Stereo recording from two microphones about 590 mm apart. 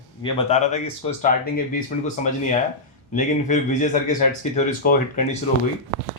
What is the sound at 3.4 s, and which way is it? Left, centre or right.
Speech, centre.